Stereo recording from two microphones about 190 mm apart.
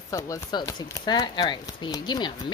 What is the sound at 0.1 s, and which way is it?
Speech, 20° left (ahead or behind).